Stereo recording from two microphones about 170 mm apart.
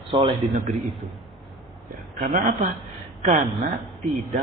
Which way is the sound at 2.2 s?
50° right (ahead or behind).